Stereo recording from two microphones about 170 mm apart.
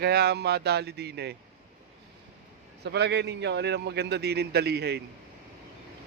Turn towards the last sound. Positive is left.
turn(degrees=-75)  # may be behind; listen again after turning